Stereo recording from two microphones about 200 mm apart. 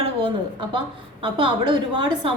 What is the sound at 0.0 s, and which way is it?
A woman's voice, 25° right (ahead or behind).